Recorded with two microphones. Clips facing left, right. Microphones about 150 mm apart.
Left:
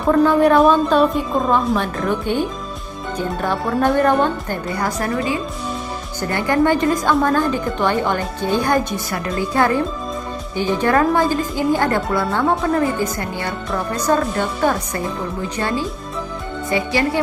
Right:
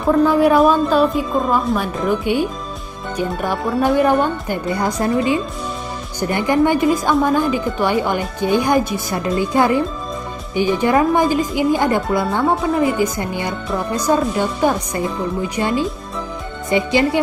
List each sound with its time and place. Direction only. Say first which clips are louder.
0.1 s a woman's voice: even; 5° right (ahead or behind)
3.4 s a woman's voice: even; 5° right (ahead or behind)
4.7 s a woman's voice: right 3 dB; 20° right (ahead or behind)